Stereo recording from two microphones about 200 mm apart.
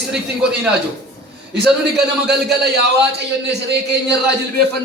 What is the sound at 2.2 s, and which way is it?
Speech, 55° right (ahead or behind).